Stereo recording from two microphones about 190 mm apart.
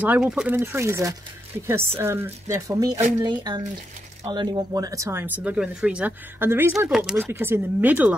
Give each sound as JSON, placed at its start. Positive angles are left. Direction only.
{"t": 0.0, "sound": "speech", "side_deg": -5}